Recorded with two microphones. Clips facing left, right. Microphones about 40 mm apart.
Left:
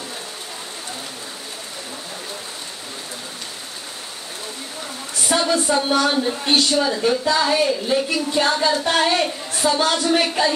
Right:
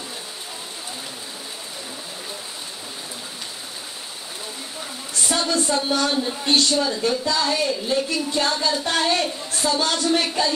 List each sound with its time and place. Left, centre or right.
5.3 s speech: centre